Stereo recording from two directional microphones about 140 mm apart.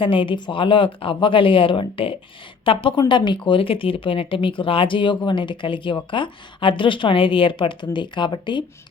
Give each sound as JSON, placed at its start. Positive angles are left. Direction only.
{"t": 0.0, "sound": "speech", "side_deg": 40}